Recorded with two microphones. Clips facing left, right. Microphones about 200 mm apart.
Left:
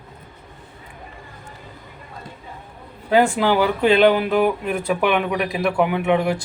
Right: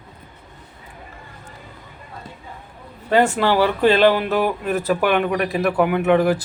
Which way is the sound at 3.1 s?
5° left (ahead or behind).